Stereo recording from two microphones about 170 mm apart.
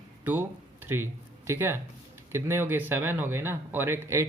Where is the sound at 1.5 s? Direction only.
15° right (ahead or behind).